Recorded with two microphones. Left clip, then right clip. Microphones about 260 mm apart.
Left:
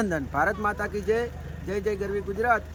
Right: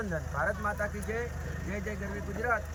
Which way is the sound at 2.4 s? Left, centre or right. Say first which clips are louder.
Left 7 dB; left.